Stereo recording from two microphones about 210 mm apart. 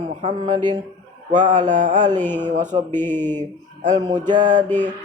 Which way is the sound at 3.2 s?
10° left (ahead or behind).